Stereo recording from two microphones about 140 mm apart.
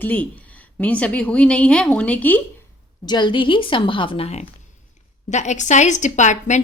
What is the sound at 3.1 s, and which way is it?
A woman's voice, 35° left (ahead or behind).